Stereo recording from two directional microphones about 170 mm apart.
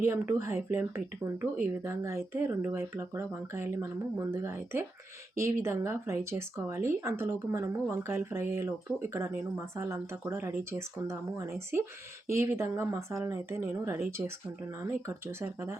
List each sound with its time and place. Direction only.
0.0 s speech: 15° right (ahead or behind)